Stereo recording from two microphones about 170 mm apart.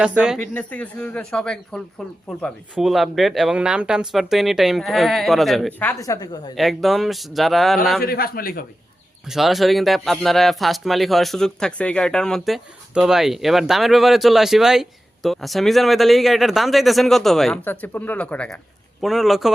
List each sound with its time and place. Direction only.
0.3 s speech: 10° left (ahead or behind)
5.8 s a woman's voice: 15° left (ahead or behind)
6.6 s speech: centre (ahead or behind)
8.0 s a man's voice: 60° left (ahead or behind)
9.3 s speech: centre (ahead or behind)